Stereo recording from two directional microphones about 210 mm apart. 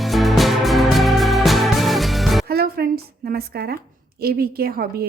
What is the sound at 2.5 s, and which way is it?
A woman's voice, 45° right (ahead or behind).